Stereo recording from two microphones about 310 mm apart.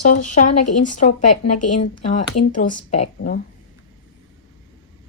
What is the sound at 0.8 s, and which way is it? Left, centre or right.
Speech, left.